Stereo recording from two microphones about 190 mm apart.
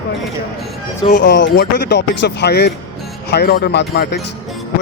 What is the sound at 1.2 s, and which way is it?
Speech, 65° left (ahead or behind).